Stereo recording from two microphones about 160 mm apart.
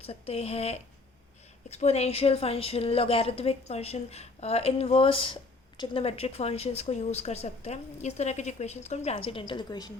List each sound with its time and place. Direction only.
0.0 s a woman's voice: 40° left (ahead or behind)